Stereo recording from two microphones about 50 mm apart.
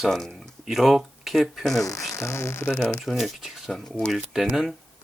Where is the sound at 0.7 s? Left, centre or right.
Centre.